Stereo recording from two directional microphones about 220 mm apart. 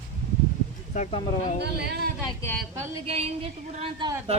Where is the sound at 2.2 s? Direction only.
10° left (ahead or behind).